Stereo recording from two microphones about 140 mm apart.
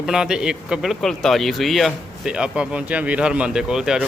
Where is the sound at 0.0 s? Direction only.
5° right (ahead or behind).